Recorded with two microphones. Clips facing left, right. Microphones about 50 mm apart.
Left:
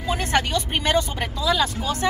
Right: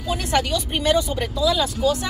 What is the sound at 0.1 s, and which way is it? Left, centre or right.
Speech, left.